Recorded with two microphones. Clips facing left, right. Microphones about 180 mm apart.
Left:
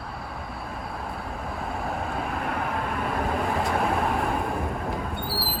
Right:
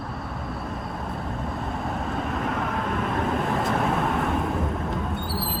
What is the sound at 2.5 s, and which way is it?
Vehicle, 55° left (ahead or behind).